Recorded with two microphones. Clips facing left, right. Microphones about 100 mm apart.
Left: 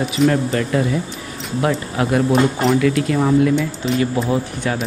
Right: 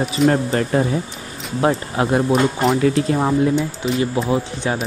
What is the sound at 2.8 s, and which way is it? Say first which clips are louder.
Speech: even; 30° right (ahead or behind).